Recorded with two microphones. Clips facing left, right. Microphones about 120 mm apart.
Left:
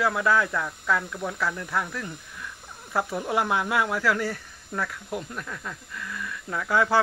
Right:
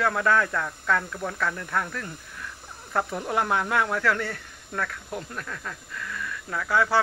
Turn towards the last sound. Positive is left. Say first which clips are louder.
# left 1 dB
turn(degrees=20)  # may be behind; listen again after turning